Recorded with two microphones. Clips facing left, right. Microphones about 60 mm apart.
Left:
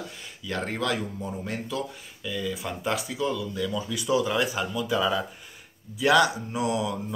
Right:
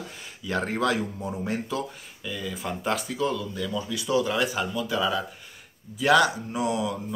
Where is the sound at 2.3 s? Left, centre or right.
Centre.